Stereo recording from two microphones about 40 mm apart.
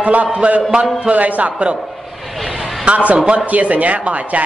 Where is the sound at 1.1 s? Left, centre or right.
Right.